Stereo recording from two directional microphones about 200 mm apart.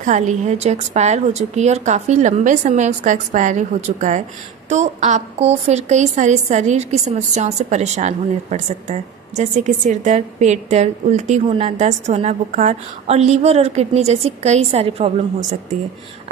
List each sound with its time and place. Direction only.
0.0 s a woman's voice: 35° right (ahead or behind)